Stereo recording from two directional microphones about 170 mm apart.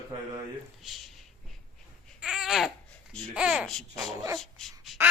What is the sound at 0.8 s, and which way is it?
Speech, centre (ahead or behind).